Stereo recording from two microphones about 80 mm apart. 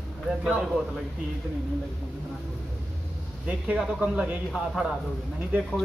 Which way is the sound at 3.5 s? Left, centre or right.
Centre.